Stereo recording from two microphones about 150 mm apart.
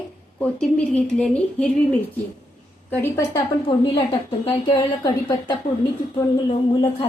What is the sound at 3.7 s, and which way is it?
Speech, 35° left (ahead or behind).